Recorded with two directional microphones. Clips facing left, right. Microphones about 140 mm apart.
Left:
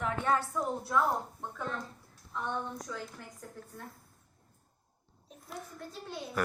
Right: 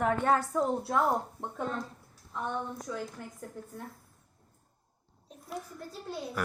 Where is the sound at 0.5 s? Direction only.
35° right (ahead or behind).